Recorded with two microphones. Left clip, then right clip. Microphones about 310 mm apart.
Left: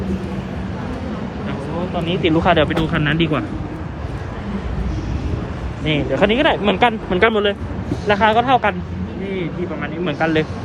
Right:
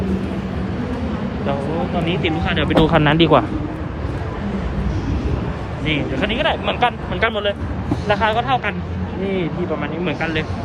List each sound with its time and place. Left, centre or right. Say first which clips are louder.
2.0 s speech: left 5 dB; centre
2.6 s speech: right 5 dB; centre
5.8 s speech: left 4 dB; centre
9.3 s speech: right 2 dB; centre
10.1 s speech: left 5 dB; centre